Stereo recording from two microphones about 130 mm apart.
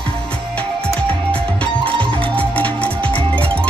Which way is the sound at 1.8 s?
40° right (ahead or behind).